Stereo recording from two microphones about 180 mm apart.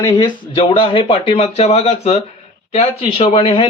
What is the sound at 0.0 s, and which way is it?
A man's voice, 20° left (ahead or behind).